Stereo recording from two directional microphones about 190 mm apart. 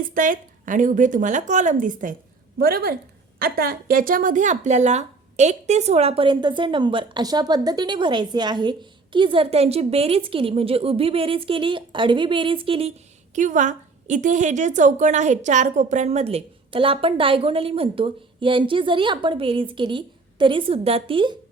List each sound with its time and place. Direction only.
0.1 s a woman's voice: 45° right (ahead or behind); by 12.9 s 30° right (ahead or behind)
13.3 s a woman's voice: 40° right (ahead or behind)